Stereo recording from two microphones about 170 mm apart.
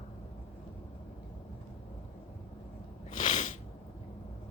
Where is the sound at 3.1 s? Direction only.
45° left (ahead or behind).